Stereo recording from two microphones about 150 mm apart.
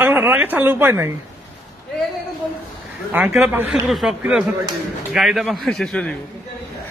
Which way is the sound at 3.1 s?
10° right (ahead or behind).